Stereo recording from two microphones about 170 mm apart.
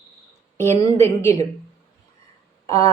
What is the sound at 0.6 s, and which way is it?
Speech, 15° left (ahead or behind).